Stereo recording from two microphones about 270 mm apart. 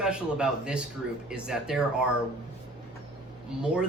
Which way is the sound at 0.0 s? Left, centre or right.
Centre.